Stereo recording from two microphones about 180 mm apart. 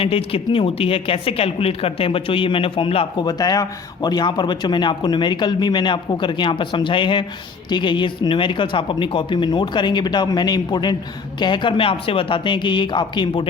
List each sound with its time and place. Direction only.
0.0 s speech: 30° left (ahead or behind)